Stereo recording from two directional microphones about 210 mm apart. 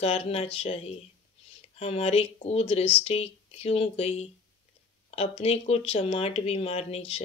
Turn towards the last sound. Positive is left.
turn(degrees=30)  # may be behind; listen again after turning